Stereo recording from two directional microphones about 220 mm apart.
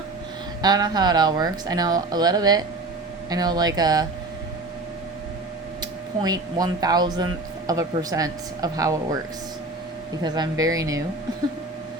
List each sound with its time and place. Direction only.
0.6 s speech: 20° right (ahead or behind)
5.8 s speech: 15° right (ahead or behind)
10.2 s speech: 20° right (ahead or behind)